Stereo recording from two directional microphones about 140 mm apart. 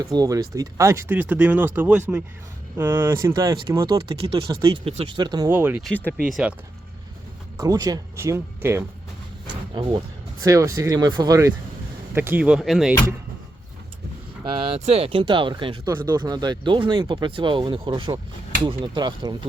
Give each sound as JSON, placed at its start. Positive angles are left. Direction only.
{"t": 0.0, "sound": "speech", "side_deg": -25}
{"t": 3.9, "sound": "speech", "side_deg": -40}
{"t": 5.5, "sound": "speech", "side_deg": -15}
{"t": 5.8, "sound": "speech", "side_deg": 10}
{"t": 6.2, "sound": "speech", "side_deg": 0}
{"t": 7.5, "sound": "speech", "side_deg": -25}
{"t": 10.4, "sound": "speech", "side_deg": -20}
{"t": 14.4, "sound": "speech", "side_deg": -40}